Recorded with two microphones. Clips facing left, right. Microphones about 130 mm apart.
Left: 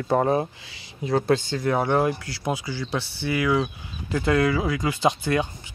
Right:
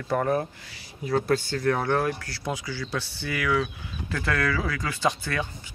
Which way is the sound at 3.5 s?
25° left (ahead or behind).